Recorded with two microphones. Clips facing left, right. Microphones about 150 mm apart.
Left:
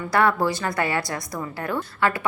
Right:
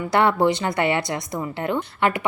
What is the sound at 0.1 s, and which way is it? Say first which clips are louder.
A woman's voice: right 2 dB; 25° right (ahead or behind).